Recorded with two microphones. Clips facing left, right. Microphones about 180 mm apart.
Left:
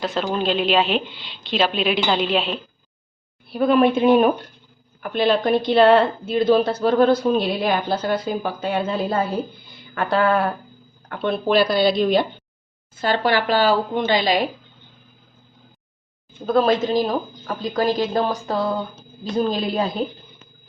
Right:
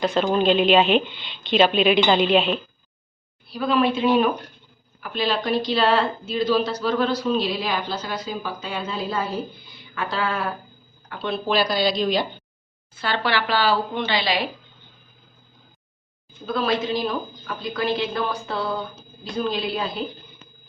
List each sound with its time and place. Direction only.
0.0 s a woman's voice: centre (ahead or behind)
3.5 s a woman's voice: 55° left (ahead or behind)
16.5 s a woman's voice: 45° left (ahead or behind)